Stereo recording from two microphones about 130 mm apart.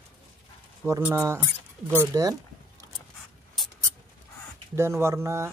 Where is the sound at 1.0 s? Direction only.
20° right (ahead or behind).